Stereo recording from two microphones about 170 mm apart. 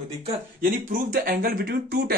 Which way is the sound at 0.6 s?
55° right (ahead or behind).